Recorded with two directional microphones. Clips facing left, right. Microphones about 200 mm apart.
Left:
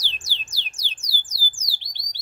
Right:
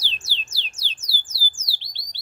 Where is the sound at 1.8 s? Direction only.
15° left (ahead or behind).